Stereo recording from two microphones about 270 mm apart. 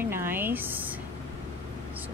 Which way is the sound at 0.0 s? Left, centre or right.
Centre.